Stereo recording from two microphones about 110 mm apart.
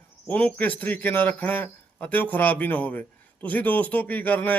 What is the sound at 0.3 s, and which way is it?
A man's voice, 15° left (ahead or behind).